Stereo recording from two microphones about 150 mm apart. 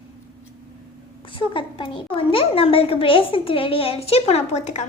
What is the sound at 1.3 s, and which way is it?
A child's voice, 35° left (ahead or behind).